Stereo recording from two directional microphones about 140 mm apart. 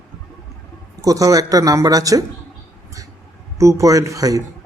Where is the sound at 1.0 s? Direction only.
25° right (ahead or behind).